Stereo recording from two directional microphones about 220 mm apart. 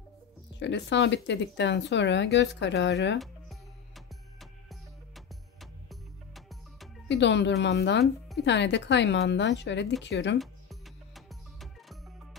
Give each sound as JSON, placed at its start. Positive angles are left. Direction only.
{"t": 0.6, "sound": "speech", "side_deg": 55}
{"t": 3.2, "sound": "music", "side_deg": 0}
{"t": 7.1, "sound": "speech", "side_deg": 55}
{"t": 10.4, "sound": "music", "side_deg": 0}